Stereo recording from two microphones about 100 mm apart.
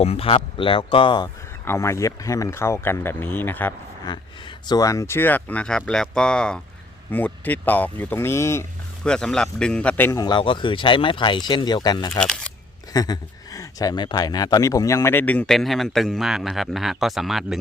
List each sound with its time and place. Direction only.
0.0 s speech: 80° left; by 1.3 s 55° left (ahead or behind)
1.6 s speech: 25° left (ahead or behind)
4.6 s a man's voice: 40° left (ahead or behind)
9.0 s a man's voice: 5° left (ahead or behind)
10.2 s speech: 50° left (ahead or behind); by 15.5 s 15° left (ahead or behind)
15.5 s speech: centre (ahead or behind)